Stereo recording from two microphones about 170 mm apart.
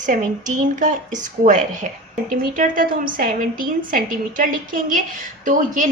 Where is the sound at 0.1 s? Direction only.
50° right (ahead or behind).